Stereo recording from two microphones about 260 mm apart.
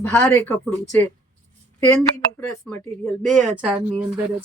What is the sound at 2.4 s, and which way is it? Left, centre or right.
Speech, centre.